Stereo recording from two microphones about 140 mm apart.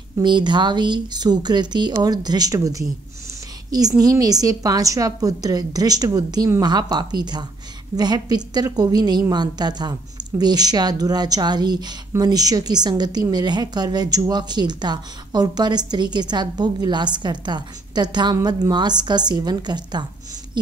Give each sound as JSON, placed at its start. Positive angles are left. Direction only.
{"t": 0.2, "sound": "a woman's voice", "side_deg": -35}
{"t": 4.0, "sound": "a woman's voice", "side_deg": -25}